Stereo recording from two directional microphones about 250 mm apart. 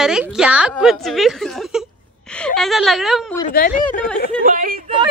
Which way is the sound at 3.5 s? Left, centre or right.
Left.